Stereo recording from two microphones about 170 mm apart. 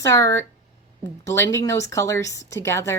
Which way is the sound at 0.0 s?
20° left (ahead or behind).